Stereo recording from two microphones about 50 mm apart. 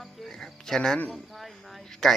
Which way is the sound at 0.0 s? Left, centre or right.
Centre.